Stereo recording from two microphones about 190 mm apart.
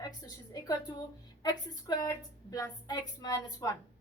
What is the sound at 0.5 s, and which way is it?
A woman's voice, 20° left (ahead or behind).